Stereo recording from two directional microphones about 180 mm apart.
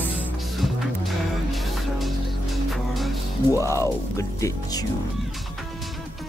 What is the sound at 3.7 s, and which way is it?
Speech, 15° left (ahead or behind).